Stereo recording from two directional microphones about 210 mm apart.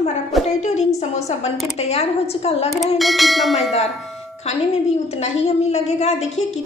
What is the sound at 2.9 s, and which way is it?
Bell, centre (ahead or behind).